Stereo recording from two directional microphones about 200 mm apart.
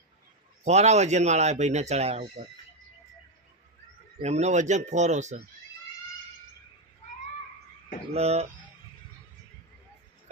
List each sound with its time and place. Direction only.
0.6 s speech: 35° right (ahead or behind)
4.2 s speech: 35° right (ahead or behind)
8.1 s speech: 30° right (ahead or behind)